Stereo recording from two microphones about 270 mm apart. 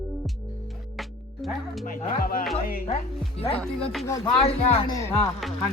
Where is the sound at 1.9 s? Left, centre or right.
Left.